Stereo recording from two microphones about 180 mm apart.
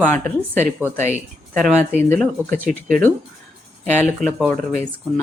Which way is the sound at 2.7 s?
50° right (ahead or behind).